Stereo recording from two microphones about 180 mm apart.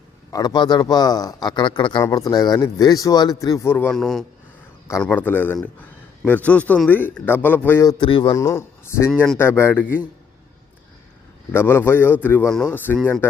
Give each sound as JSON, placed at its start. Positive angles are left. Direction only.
{"t": 0.3, "sound": "a man's voice", "side_deg": 20}
{"t": 4.9, "sound": "a man's voice", "side_deg": 15}
{"t": 8.4, "sound": "speech", "side_deg": 15}
{"t": 9.1, "sound": "speech", "side_deg": 5}
{"t": 9.4, "sound": "a man's voice", "side_deg": 15}
{"t": 11.5, "sound": "a man's voice", "side_deg": 10}